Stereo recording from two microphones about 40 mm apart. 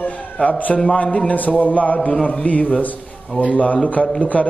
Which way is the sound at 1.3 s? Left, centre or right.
Left.